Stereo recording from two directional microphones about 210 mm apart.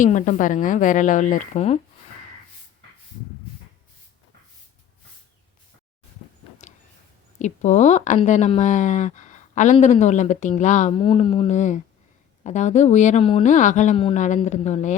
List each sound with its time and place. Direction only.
0.0 s speech: 35° left (ahead or behind)
7.3 s speech: 35° left (ahead or behind)